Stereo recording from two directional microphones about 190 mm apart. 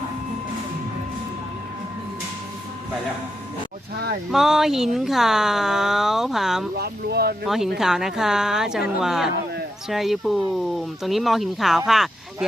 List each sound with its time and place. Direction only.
4.3 s speech: centre (ahead or behind)
6.7 s speech: 55° right (ahead or behind)
7.4 s speech: centre (ahead or behind)